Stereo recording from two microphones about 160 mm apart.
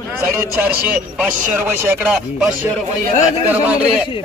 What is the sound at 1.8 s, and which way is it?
Chopping, 10° right (ahead or behind).